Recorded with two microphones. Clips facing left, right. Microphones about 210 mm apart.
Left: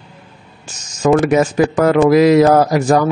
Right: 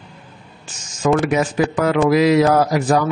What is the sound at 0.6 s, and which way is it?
A man's voice, 45° left (ahead or behind).